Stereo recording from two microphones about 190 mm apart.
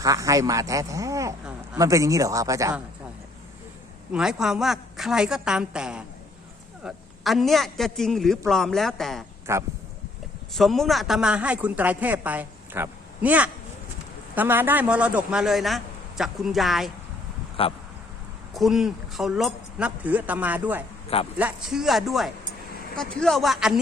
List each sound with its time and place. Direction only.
0.0 s a man's voice: 20° right (ahead or behind)
4.1 s a man's voice: 5° right (ahead or behind)
9.5 s a man's voice: 15° right (ahead or behind)
10.5 s a man's voice: centre (ahead or behind)
17.6 s speech: 30° left (ahead or behind)
18.5 s a man's voice: centre (ahead or behind)